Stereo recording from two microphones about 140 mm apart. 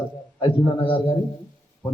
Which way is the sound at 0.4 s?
35° left (ahead or behind).